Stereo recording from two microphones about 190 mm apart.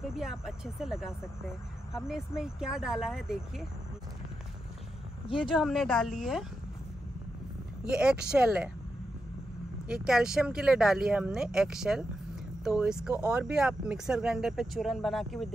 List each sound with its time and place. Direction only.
0.0 s speech: centre (ahead or behind)
5.6 s speech: centre (ahead or behind)
7.9 s speech: 5° right (ahead or behind)
9.8 s speech: 5° right (ahead or behind)